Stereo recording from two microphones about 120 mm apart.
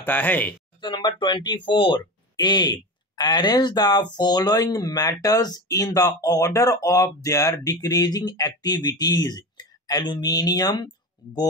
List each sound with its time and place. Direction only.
0.0 s speech: 15° left (ahead or behind)
0.7 s speech: 40° left (ahead or behind)